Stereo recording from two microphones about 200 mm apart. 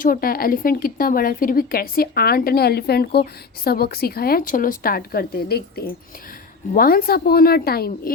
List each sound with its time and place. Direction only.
0.0 s speech: 45° left (ahead or behind)